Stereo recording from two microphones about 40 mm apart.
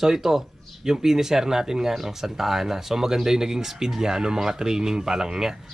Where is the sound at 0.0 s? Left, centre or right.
Centre.